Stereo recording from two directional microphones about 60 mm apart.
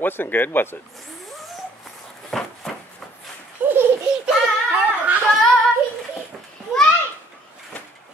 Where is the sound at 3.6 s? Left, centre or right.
Right.